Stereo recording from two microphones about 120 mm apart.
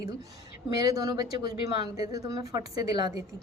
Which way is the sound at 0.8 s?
30° right (ahead or behind).